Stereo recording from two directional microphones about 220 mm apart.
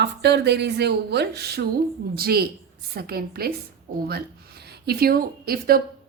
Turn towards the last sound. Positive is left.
turn(degrees=-40)  # may be behind; listen again after turning